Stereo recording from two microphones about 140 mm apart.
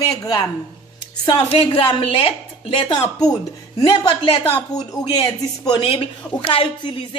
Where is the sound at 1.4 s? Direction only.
40° left (ahead or behind).